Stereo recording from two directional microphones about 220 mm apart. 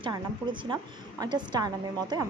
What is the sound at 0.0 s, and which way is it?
A woman's voice, 20° right (ahead or behind).